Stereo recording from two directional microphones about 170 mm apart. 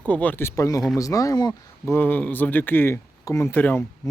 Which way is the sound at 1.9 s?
10° left (ahead or behind).